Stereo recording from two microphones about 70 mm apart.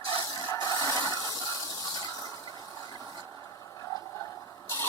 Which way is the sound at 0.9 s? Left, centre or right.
Right.